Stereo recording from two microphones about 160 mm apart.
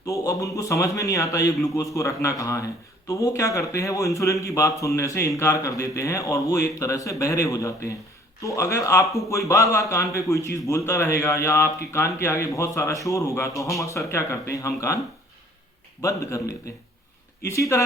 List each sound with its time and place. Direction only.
0.0 s a man's voice: 20° left (ahead or behind)
16.0 s a man's voice: 20° left (ahead or behind)
17.4 s a man's voice: 20° left (ahead or behind)